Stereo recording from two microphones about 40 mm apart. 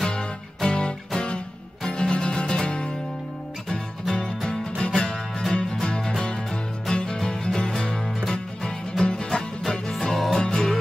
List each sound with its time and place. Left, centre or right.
0.0 s music: centre
4.1 s music: centre